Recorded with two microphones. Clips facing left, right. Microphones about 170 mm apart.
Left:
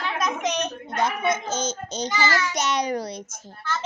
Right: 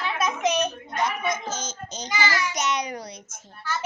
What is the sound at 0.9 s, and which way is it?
A child's voice, 25° left (ahead or behind).